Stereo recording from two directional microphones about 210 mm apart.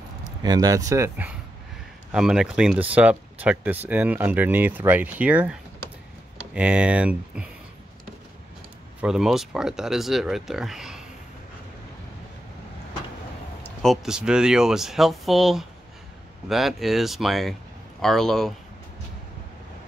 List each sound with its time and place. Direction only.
0.4 s speech: 15° right (ahead or behind)
9.0 s speech: centre (ahead or behind)
13.6 s a sound: 10° left (ahead or behind)
14.0 s speech: 5° right (ahead or behind)